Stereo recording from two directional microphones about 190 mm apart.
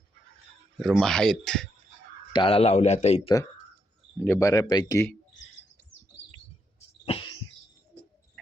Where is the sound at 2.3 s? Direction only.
25° left (ahead or behind).